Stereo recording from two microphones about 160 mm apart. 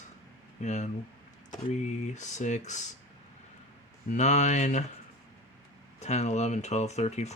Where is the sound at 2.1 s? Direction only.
50° left (ahead or behind).